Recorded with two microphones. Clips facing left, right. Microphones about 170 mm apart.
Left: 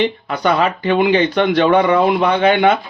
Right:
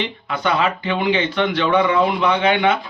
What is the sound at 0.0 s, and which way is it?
Speech, 40° left (ahead or behind).